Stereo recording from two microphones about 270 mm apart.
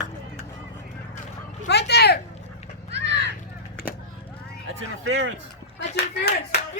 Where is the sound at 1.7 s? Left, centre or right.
Left.